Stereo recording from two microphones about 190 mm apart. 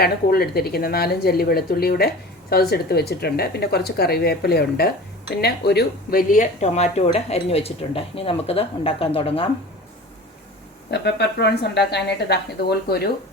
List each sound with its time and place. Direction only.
0.0 s a woman's voice: 55° left (ahead or behind); by 9.5 s 30° left (ahead or behind)
10.9 s speech: 65° left (ahead or behind)